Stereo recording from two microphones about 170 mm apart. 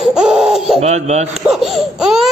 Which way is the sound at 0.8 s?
40° right (ahead or behind).